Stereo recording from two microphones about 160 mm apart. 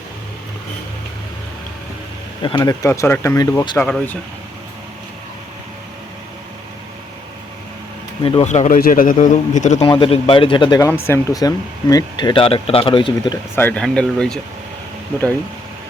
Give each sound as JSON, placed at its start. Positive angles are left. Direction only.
{"t": 2.4, "sound": "speech", "side_deg": 30}
{"t": 3.8, "sound": "speech", "side_deg": 5}
{"t": 8.2, "sound": "a man's voice", "side_deg": 35}
{"t": 8.8, "sound": "a man's voice", "side_deg": 60}
{"t": 9.8, "sound": "speech", "side_deg": 35}
{"t": 13.6, "sound": "speech", "side_deg": 10}